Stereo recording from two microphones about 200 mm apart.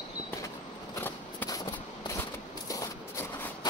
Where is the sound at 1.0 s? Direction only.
10° left (ahead or behind).